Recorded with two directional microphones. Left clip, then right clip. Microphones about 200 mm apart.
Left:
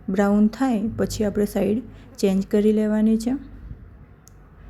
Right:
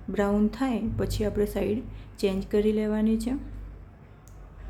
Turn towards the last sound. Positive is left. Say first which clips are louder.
# left 5 dB
turn(degrees=25)  # may be behind; listen again after turning